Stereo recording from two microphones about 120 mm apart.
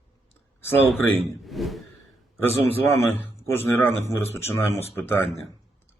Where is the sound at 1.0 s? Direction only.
25° left (ahead or behind).